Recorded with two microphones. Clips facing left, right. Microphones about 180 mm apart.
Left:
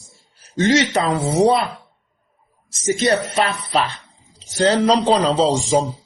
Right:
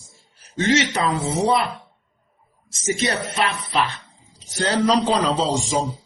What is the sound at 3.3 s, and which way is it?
A man's voice, 40° left (ahead or behind).